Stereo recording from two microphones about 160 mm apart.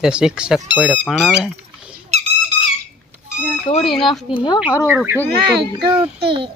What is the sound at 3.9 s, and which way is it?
Speech, 30° left (ahead or behind).